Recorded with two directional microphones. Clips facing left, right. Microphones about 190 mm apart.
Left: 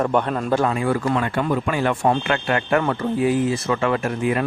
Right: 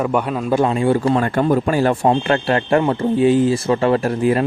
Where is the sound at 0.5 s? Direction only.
25° right (ahead or behind).